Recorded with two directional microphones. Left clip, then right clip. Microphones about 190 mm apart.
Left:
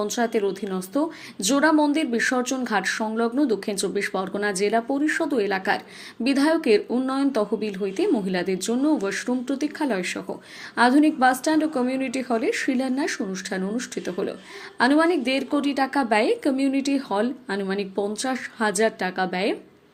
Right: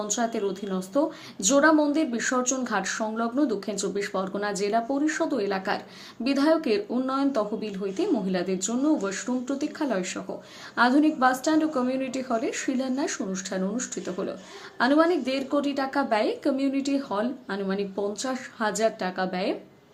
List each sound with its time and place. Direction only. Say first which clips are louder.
0.1 s a woman's voice: left 4 dB; 15° left (ahead or behind)